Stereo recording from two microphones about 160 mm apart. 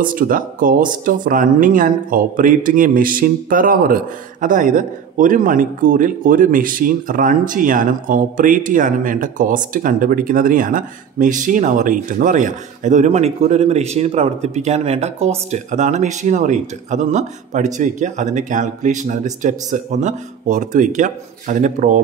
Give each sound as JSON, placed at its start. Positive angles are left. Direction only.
{"t": 0.0, "sound": "speech", "side_deg": -60}